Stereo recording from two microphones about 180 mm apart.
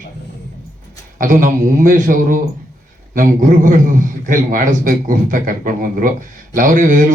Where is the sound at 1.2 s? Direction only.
45° right (ahead or behind).